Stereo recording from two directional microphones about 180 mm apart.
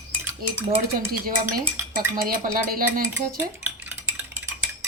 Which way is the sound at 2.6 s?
55° right (ahead or behind).